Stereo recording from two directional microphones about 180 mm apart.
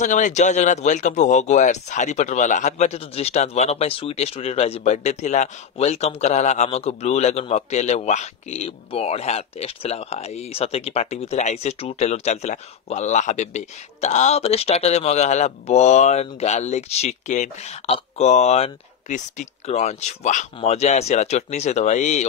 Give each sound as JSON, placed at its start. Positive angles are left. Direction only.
{"t": 0.0, "sound": "speech", "side_deg": 45}